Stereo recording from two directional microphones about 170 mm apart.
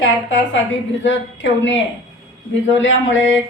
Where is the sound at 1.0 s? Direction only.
90° left.